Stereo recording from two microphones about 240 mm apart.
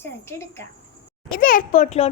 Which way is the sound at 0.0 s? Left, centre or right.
Centre.